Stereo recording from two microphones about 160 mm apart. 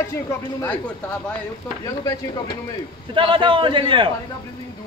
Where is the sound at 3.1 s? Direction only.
30° right (ahead or behind).